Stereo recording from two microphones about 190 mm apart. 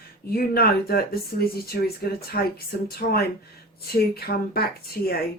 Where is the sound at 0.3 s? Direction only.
50° left (ahead or behind).